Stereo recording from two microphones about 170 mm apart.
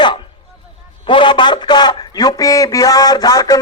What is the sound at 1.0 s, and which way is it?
A man's voice, 30° left (ahead or behind).